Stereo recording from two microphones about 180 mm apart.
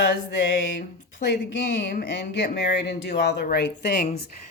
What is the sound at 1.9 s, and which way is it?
Speech, 60° left (ahead or behind).